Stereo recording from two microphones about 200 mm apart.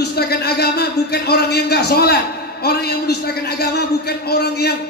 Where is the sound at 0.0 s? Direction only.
55° left (ahead or behind).